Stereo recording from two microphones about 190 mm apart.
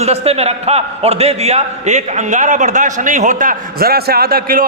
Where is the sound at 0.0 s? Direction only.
35° right (ahead or behind).